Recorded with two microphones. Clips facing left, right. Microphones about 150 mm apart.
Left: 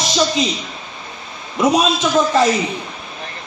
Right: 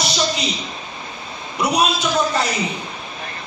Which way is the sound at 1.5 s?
90° left.